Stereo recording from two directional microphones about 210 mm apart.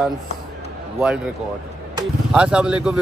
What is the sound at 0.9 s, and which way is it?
Speech, 5° right (ahead or behind).